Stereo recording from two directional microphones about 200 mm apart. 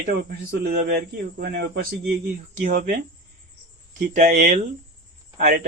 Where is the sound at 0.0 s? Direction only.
50° right (ahead or behind).